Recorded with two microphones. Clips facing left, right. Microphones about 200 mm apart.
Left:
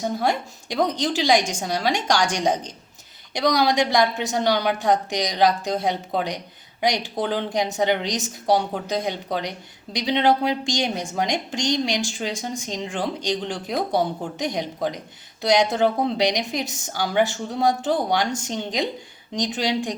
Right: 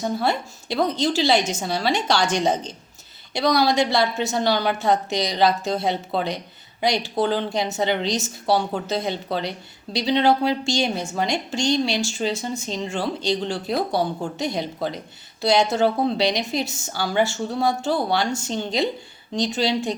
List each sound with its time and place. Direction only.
0.2 s a woman's voice: 15° left (ahead or behind)